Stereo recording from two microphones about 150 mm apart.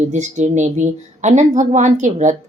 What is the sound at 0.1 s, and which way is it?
Speech, 50° right (ahead or behind).